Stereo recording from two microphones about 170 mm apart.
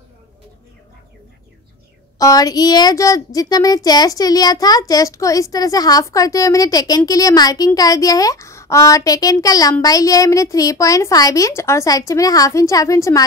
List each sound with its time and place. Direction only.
2.1 s a woman's voice: 20° left (ahead or behind)